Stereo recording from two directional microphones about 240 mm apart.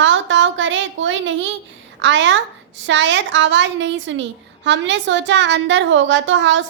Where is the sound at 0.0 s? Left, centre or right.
Right.